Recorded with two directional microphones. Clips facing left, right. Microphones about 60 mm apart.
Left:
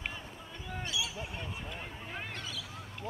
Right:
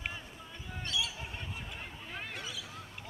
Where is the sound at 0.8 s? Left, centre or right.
Centre.